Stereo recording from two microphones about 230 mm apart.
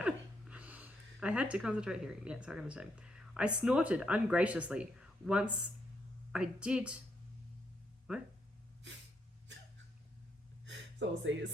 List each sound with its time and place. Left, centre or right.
0.0 s a woman's voice: centre
10.7 s gasp: right